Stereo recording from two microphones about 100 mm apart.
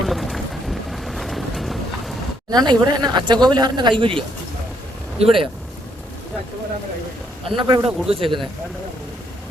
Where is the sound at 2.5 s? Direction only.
45° right (ahead or behind).